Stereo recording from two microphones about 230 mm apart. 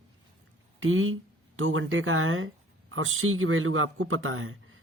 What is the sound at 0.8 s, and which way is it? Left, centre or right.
Speech, right.